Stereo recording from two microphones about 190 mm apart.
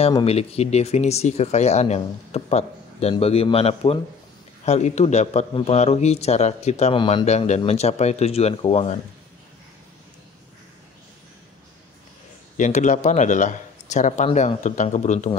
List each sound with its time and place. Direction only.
0.0 s speech: 30° left (ahead or behind)
7.0 s speech: 25° left (ahead or behind)
7.2 s speech: 35° left (ahead or behind)
12.5 s speech: 40° left (ahead or behind)